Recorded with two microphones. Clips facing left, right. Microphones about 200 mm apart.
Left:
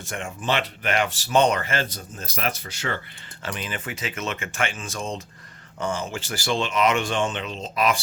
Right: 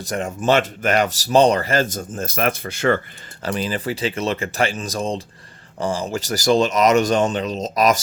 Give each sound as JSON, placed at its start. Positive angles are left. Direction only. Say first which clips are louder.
{"t": 0.0, "sound": "speech", "louder": "right 8 dB", "side_deg": -40}
{"t": 3.4, "sound": "speech", "louder": "right 9 dB", "side_deg": -35}